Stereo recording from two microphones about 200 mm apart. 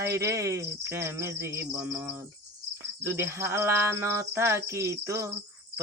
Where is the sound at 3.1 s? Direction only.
10° right (ahead or behind).